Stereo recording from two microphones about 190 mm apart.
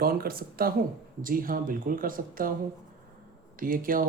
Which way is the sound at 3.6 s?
45° right (ahead or behind).